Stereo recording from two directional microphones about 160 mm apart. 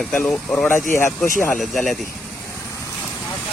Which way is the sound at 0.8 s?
55° left (ahead or behind).